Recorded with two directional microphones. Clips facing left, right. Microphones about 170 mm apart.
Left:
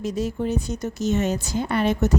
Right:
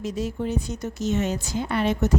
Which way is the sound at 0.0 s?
40° left (ahead or behind).